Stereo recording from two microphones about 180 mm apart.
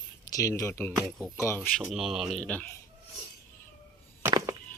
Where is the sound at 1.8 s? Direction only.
Centre (ahead or behind).